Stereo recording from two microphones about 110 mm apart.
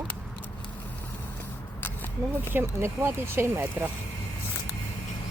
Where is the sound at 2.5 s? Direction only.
20° right (ahead or behind).